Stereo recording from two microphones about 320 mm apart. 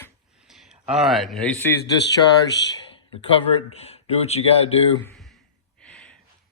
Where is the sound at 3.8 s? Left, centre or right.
Centre.